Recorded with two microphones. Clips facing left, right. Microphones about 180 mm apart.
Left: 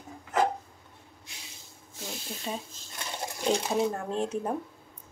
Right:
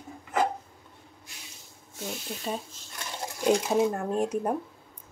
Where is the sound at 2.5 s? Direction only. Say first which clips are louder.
Right 2 dB; centre (ahead or behind).